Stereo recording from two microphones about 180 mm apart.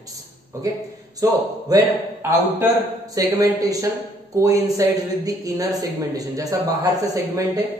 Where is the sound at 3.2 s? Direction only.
20° right (ahead or behind).